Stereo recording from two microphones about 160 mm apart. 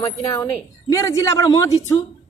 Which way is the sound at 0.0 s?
20° left (ahead or behind).